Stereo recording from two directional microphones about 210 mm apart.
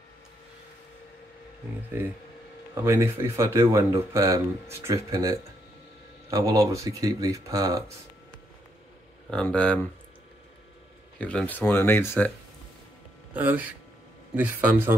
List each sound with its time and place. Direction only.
2.0 s speech: 10° right (ahead or behind)
9.3 s speech: 5° left (ahead or behind)
11.1 s speech: 5° left (ahead or behind)
13.3 s speech: 5° right (ahead or behind)